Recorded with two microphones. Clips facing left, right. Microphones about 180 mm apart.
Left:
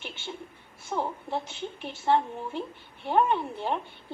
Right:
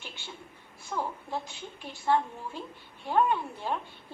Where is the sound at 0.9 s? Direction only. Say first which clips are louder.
Left 3 dB; 25° left (ahead or behind).